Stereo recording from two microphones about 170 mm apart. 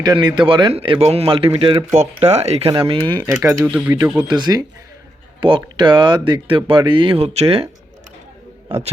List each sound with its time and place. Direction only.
0.0 s speech: 25° right (ahead or behind)
3.2 s speech: 20° right (ahead or behind)
3.7 s speech: 5° right (ahead or behind)
4.2 s speech: 25° right (ahead or behind)